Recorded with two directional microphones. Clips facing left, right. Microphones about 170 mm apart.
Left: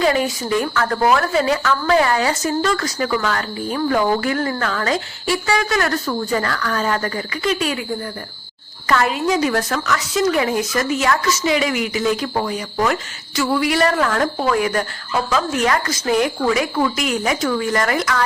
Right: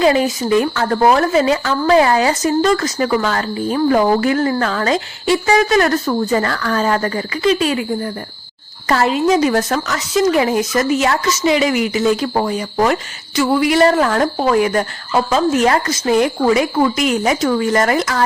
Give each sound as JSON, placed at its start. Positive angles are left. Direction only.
{"t": 0.6, "sound": "a woman's voice", "side_deg": -25}
{"t": 6.1, "sound": "a woman's voice", "side_deg": -35}
{"t": 8.9, "sound": "a woman's voice", "side_deg": -30}
{"t": 13.5, "sound": "a woman's voice", "side_deg": -25}